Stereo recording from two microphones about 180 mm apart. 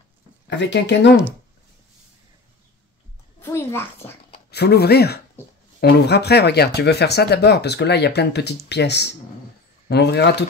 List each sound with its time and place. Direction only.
0.5 s speech: 75° left (ahead or behind)
3.3 s a child's voice: 15° left (ahead or behind)
4.5 s speech: 65° left (ahead or behind)